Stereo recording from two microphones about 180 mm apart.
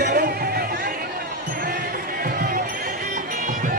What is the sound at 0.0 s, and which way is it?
Music, 65° right (ahead or behind).